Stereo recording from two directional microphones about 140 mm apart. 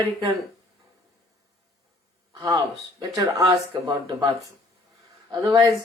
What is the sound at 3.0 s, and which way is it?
Speech, 25° right (ahead or behind).